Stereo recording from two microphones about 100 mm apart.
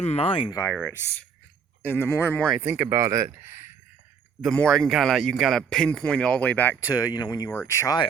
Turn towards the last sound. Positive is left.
turn(degrees=25)  # may be behind; listen again after turning